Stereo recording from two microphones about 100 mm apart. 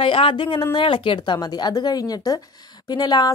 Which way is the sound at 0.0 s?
60° left (ahead or behind).